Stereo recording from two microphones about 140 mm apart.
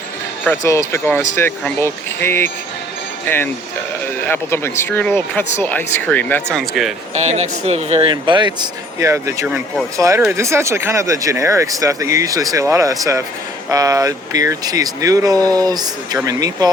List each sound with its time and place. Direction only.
0.4 s speech: 20° left (ahead or behind)
6.6 s speech: centre (ahead or behind)
7.1 s a man's voice: 50° right (ahead or behind)
8.1 s speech: 35° right (ahead or behind)
9.0 s speech: 20° right (ahead or behind)